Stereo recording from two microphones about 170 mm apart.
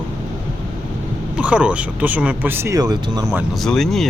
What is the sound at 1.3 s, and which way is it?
Speech, 5° right (ahead or behind).